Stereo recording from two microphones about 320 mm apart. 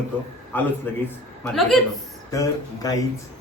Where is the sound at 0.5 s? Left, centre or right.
Centre.